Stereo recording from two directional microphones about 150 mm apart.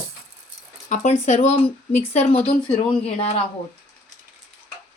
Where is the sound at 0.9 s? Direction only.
50° left (ahead or behind).